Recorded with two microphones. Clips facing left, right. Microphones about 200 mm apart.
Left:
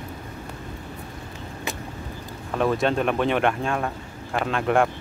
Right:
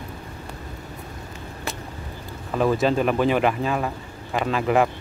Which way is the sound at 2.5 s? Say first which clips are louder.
Right 2 dB; centre (ahead or behind).